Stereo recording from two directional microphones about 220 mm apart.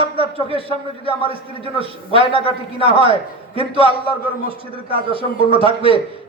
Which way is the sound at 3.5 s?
25° right (ahead or behind).